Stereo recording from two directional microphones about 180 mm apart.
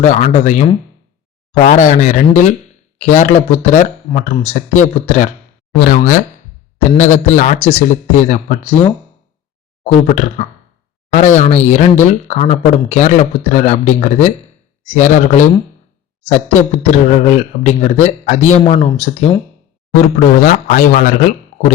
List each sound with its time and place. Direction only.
0.0 s speech: 40° left (ahead or behind)
9.8 s speech: 40° left (ahead or behind)
20.0 s speech: 50° left (ahead or behind)